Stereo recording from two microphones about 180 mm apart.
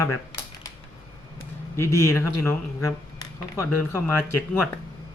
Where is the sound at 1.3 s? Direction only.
15° left (ahead or behind).